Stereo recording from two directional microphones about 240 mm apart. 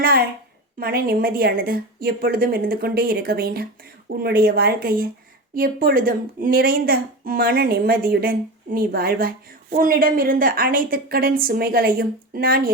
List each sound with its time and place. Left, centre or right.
0.0 s a woman's voice: right